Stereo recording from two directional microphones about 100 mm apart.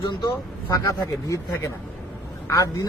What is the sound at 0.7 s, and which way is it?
Speech, 35° left (ahead or behind).